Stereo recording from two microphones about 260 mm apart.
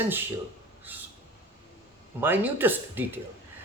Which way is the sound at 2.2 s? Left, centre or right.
Centre.